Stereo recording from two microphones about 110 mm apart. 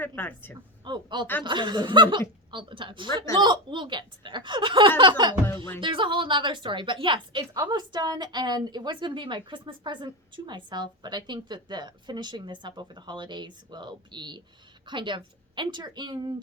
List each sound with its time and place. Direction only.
0.0 s speech: 15° left (ahead or behind)
0.9 s a woman's voice: 45° right (ahead or behind)